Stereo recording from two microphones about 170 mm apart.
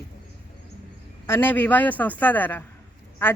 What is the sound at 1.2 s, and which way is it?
A woman's voice, 10° left (ahead or behind).